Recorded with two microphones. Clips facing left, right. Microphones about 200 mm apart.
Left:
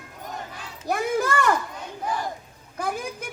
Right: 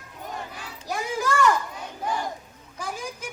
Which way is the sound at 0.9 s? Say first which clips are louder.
Left 3 dB; 55° left (ahead or behind).